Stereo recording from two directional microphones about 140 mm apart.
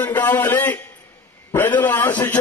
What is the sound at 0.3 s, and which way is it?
A man's voice, 15° left (ahead or behind).